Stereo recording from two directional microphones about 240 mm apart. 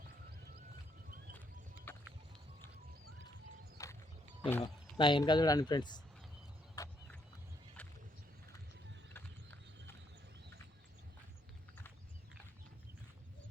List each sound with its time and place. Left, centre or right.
1.9 s a sound: centre
3.8 s clip-clop: centre
4.4 s speech: centre
4.9 s speech: centre